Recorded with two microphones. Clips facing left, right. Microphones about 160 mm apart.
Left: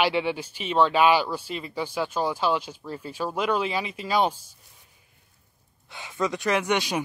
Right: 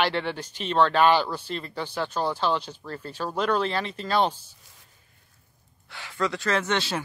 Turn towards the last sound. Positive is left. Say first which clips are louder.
# left 2 dB
turn(degrees=15)  # may be behind; listen again after turning